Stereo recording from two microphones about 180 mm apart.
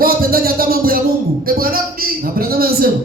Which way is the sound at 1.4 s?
55° right (ahead or behind).